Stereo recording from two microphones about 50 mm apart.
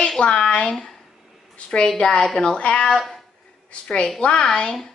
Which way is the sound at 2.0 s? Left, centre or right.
Centre.